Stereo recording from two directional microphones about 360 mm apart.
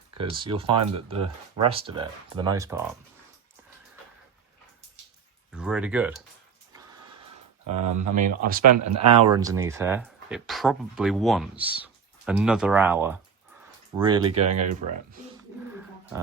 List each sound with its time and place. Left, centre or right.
0.2 s speech: centre
5.5 s speech: centre
7.8 s speech: right
8.1 s speech: right
8.6 s speech: right
9.3 s speech: centre